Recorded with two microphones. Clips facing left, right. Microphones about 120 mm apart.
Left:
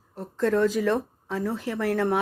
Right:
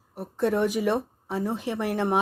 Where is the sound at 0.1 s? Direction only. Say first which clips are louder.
Left 1 dB; 15° right (ahead or behind).